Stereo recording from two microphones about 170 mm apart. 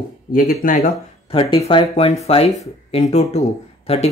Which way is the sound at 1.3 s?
35° left (ahead or behind).